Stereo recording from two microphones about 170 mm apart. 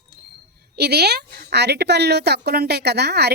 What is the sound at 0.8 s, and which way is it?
A woman's voice, 70° right (ahead or behind).